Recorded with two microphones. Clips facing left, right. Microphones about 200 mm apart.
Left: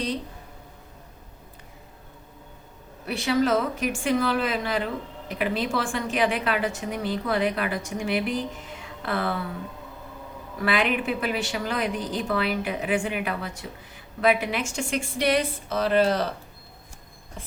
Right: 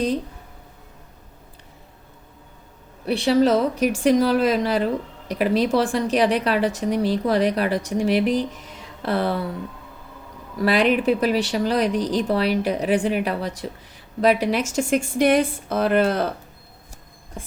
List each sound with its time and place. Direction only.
3.1 s speech: 35° right (ahead or behind)
10.6 s speech: 35° right (ahead or behind); by 16.3 s 55° right (ahead or behind)